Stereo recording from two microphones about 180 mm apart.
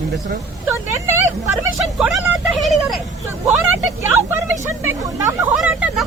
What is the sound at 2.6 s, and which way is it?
Vehicle, centre (ahead or behind).